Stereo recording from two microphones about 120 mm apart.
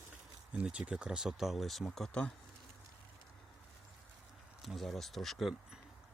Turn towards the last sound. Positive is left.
turn(degrees=0)  # may be behind; listen again after turning